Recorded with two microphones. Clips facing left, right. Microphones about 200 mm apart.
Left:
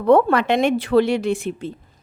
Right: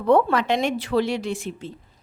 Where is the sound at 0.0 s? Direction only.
60° left (ahead or behind).